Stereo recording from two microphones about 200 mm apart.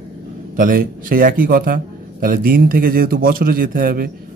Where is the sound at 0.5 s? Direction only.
45° right (ahead or behind).